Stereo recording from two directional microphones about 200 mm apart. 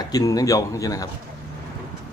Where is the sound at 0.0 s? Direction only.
20° left (ahead or behind).